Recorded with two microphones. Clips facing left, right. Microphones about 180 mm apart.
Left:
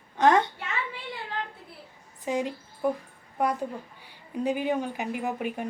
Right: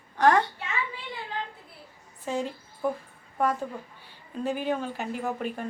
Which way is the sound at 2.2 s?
15° left (ahead or behind).